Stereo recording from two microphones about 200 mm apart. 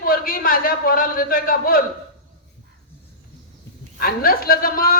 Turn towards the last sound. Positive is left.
turn(degrees=45)  # may be behind; listen again after turning